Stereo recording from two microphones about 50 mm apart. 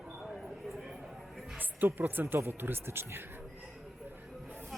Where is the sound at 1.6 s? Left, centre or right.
Right.